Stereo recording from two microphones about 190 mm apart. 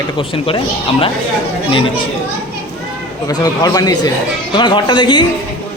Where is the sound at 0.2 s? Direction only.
30° left (ahead or behind).